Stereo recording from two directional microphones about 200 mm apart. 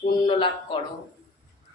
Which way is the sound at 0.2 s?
25° left (ahead or behind).